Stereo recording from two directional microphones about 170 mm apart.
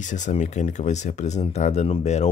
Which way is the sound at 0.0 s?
45° left (ahead or behind).